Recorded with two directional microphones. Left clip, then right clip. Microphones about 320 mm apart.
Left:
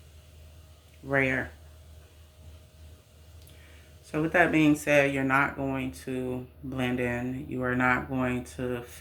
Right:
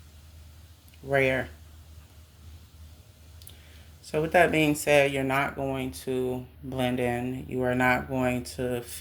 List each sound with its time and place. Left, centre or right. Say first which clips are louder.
1.1 s speech: right 2 dB; right
4.1 s speech: right 2 dB; right